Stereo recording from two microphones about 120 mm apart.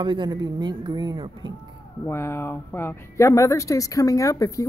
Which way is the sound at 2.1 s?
20° left (ahead or behind).